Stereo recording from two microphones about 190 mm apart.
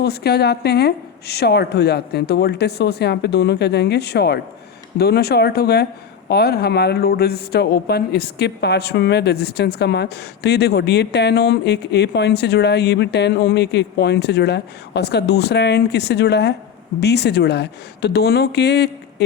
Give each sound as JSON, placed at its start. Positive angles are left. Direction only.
{"t": 0.0, "sound": "speech", "side_deg": 55}